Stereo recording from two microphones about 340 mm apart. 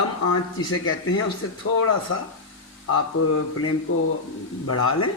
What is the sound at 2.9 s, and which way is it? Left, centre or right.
Speech, left.